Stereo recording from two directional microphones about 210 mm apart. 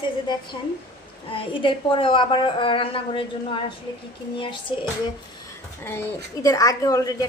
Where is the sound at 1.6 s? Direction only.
25° left (ahead or behind).